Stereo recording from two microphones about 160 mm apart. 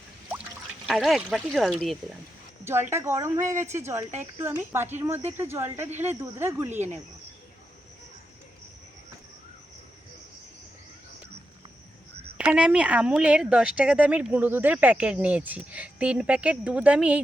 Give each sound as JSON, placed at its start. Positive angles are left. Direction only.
{"t": 0.9, "sound": "speech", "side_deg": 0}
{"t": 2.6, "sound": "speech", "side_deg": -15}
{"t": 12.4, "sound": "speech", "side_deg": -5}